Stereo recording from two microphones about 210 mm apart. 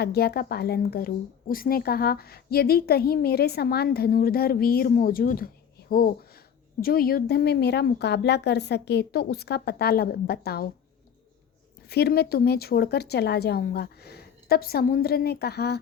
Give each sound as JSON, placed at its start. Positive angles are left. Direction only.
{"t": 0.0, "sound": "a woman's voice", "side_deg": 50}
{"t": 11.9, "sound": "a woman's voice", "side_deg": 50}